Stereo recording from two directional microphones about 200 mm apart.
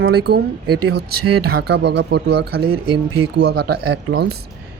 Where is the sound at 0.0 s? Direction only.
50° right (ahead or behind).